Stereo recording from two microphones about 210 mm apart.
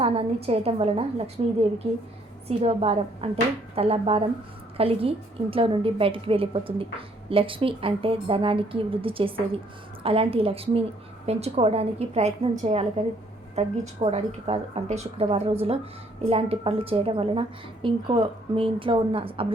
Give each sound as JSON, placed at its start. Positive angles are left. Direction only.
{"t": 0.0, "sound": "a woman's voice", "side_deg": -25}